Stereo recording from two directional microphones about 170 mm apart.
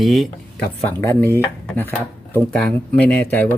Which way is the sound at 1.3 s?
10° left (ahead or behind).